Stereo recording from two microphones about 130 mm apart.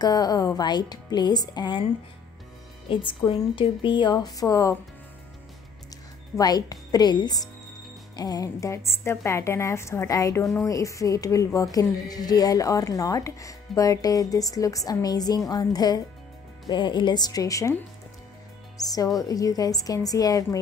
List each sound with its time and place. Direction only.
0.0 s a woman's voice: 30° left (ahead or behind)
2.9 s a woman's voice: 40° left (ahead or behind)
6.3 s a woman's voice: 30° left (ahead or behind)
18.8 s a woman's voice: 30° left (ahead or behind)